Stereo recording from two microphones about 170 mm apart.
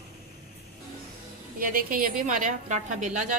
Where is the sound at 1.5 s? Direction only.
55° right (ahead or behind).